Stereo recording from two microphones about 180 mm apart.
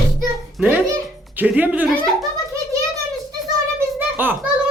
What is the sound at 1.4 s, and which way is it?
Speech, 10° right (ahead or behind).